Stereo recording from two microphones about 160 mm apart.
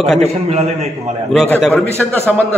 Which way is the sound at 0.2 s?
40° right (ahead or behind).